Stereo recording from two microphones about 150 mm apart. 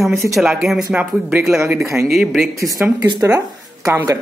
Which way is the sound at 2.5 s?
20° right (ahead or behind).